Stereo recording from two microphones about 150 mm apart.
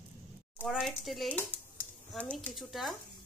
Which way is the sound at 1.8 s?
10° left (ahead or behind).